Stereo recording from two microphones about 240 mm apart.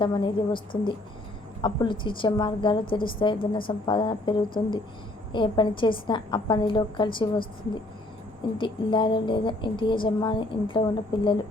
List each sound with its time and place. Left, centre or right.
0.0 s speech: centre
1.6 s speech: centre
8.5 s speech: centre